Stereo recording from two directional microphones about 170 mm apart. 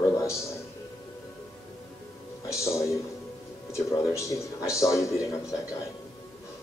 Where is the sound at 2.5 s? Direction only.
15° left (ahead or behind).